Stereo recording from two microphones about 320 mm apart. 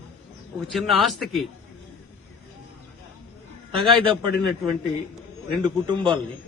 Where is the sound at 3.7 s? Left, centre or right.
Centre.